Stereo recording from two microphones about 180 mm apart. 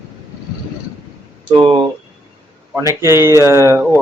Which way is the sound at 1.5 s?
30° right (ahead or behind).